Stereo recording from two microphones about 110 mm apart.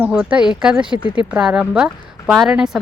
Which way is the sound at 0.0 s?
10° right (ahead or behind).